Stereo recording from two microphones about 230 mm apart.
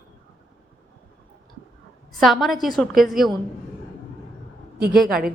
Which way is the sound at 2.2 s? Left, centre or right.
Centre.